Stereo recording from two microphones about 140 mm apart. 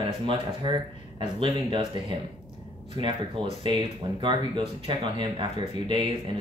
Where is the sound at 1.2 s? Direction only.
35° right (ahead or behind).